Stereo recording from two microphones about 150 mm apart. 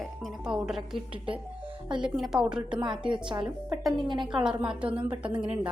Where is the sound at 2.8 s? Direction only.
30° right (ahead or behind).